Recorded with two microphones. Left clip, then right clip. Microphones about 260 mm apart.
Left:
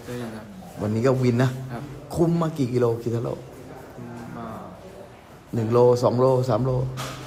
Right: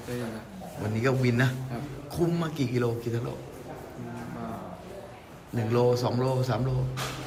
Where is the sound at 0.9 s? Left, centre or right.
Centre.